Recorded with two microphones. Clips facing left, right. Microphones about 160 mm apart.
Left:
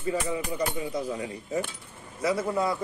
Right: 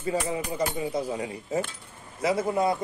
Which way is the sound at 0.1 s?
30° right (ahead or behind).